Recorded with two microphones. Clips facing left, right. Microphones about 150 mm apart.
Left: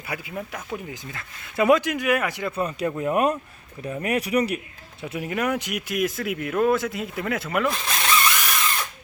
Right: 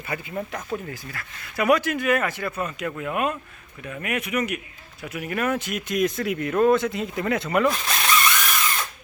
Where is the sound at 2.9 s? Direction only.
30° left (ahead or behind); by 7.7 s centre (ahead or behind).